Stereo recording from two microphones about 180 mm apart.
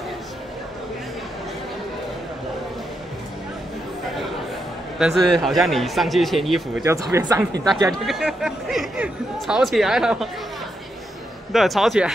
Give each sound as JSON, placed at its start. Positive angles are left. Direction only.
{"t": 4.9, "sound": "speech", "side_deg": 0}
{"t": 6.8, "sound": "speech", "side_deg": -15}
{"t": 8.0, "sound": "speech", "side_deg": 0}
{"t": 11.5, "sound": "speech", "side_deg": 0}